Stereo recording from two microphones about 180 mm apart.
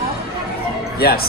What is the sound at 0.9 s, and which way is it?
Speech, 60° left (ahead or behind).